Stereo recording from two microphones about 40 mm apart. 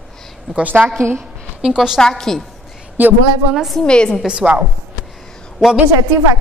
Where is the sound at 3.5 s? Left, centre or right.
Centre.